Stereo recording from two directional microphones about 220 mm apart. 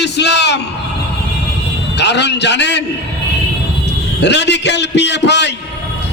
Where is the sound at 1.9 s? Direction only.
50° left (ahead or behind).